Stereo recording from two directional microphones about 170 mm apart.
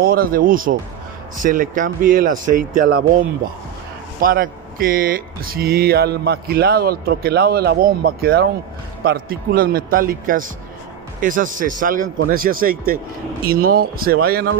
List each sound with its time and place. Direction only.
0.0 s speech: 60° right (ahead or behind)